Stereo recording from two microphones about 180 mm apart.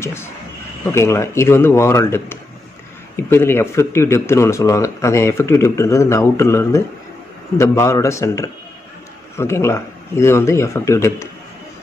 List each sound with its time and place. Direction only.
0.0 s speech: 15° left (ahead or behind)